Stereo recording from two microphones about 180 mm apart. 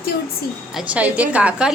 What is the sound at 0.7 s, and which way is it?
Speech, 10° right (ahead or behind).